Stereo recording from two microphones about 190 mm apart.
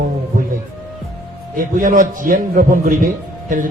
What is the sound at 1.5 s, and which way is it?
A man's voice, 45° right (ahead or behind).